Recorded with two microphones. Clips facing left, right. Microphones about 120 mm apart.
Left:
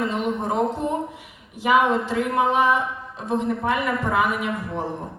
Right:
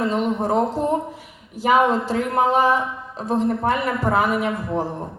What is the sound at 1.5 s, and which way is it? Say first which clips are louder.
A man's voice: right 2 dB; 35° right (ahead or behind).